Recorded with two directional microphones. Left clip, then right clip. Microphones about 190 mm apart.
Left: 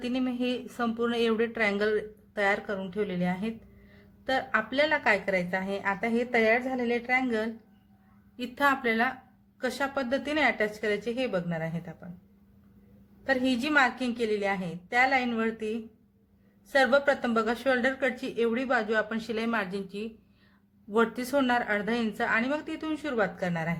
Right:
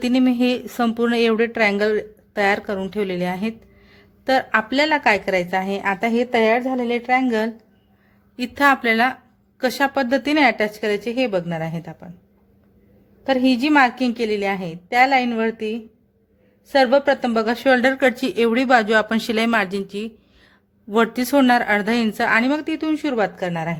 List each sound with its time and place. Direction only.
0.0 s speech: 45° right (ahead or behind)
13.2 s speech: 40° right (ahead or behind)